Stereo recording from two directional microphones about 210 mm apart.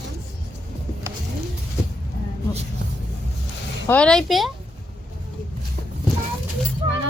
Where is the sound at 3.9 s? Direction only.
5° left (ahead or behind).